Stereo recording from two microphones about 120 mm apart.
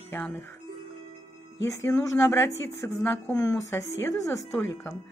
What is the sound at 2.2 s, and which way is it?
Speech, 20° left (ahead or behind).